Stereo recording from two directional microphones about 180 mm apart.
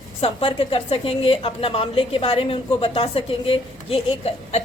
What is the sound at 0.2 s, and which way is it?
A woman's voice, 30° left (ahead or behind).